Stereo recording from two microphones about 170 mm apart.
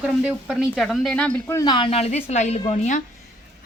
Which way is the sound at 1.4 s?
25° left (ahead or behind).